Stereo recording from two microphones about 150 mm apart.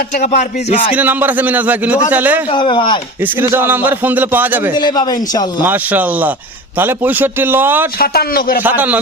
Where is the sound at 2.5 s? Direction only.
35° left (ahead or behind).